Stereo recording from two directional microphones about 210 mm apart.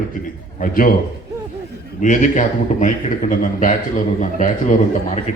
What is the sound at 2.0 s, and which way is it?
A man's voice, 35° left (ahead or behind).